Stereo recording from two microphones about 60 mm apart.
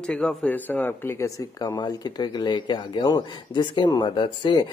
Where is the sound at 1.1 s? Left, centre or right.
Left.